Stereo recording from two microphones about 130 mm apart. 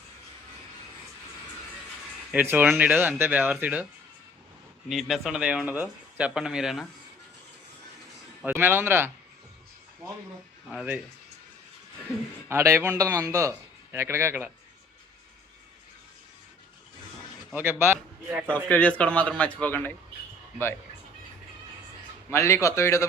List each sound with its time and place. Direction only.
2.3 s speech: 15° right (ahead or behind)
4.9 s speech: centre (ahead or behind)
8.4 s speech: 15° right (ahead or behind)
10.7 s speech: 10° right (ahead or behind)
12.5 s a man's voice: 20° right (ahead or behind)
17.5 s speech: 15° right (ahead or behind)
18.4 s a man's voice: 10° left (ahead or behind)
22.3 s a man's voice: 20° left (ahead or behind)